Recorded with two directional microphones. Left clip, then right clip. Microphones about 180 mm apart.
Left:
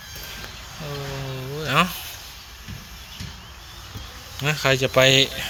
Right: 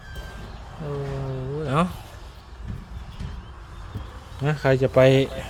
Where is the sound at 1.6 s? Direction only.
15° right (ahead or behind).